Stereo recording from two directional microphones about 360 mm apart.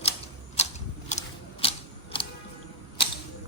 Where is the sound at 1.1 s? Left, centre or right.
Centre.